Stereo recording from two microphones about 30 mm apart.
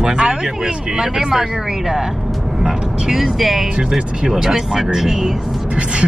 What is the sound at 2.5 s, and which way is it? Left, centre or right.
Vehicle, centre.